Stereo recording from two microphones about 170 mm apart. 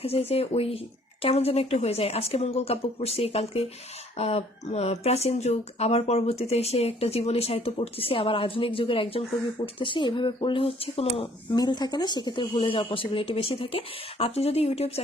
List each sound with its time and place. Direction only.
0.0 s speech: 35° left (ahead or behind)
11.5 s speech: 25° left (ahead or behind)